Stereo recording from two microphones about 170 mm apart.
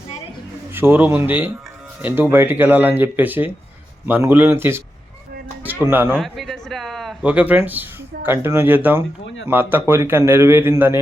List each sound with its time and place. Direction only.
0.7 s speech: 15° right (ahead or behind)
6.1 s speech: centre (ahead or behind)
9.2 s speech: 90° left
9.5 s speech: 10° right (ahead or behind)